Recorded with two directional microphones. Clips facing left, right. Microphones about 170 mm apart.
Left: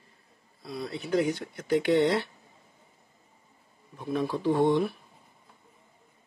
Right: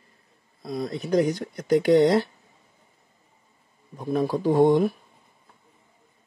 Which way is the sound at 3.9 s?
40° right (ahead or behind).